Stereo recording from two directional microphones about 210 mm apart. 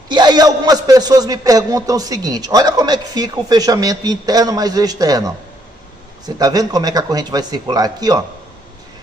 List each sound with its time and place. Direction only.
0.1 s a man's voice: 20° right (ahead or behind)